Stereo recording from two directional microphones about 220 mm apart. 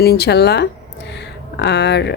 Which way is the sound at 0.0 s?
45° left (ahead or behind).